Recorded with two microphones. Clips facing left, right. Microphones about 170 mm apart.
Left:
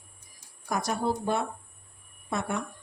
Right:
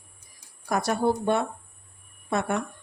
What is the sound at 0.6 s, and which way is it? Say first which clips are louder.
Speech: right 4 dB; 65° right (ahead or behind).